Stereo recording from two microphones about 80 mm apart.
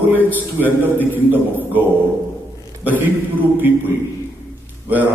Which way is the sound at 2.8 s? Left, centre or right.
Right.